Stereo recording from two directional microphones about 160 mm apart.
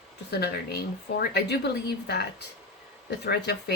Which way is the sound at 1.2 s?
90° left.